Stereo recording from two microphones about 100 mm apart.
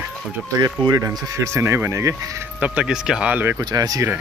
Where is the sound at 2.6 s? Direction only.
10° right (ahead or behind).